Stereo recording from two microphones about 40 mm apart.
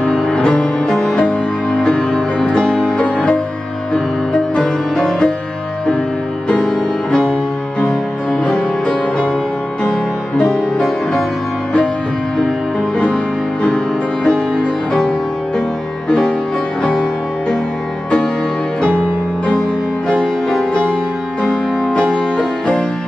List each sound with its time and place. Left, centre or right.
0.0 s music: left
4.6 s music: left
6.6 s music: centre
8.5 s music: centre
14.2 s music: left
15.0 s music: centre
18.8 s music: left
20.1 s music: left
22.1 s music: left